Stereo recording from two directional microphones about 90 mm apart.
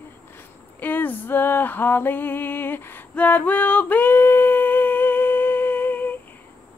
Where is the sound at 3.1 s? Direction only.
20° left (ahead or behind).